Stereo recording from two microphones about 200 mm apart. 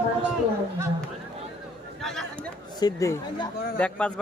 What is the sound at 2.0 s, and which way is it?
Speech, centre (ahead or behind).